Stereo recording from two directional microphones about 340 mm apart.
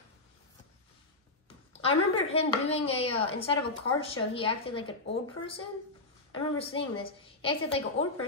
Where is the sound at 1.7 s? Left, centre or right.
Centre.